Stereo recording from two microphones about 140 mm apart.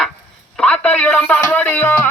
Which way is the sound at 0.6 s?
5° left (ahead or behind).